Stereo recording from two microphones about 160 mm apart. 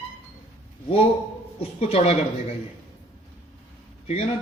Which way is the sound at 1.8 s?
40° left (ahead or behind).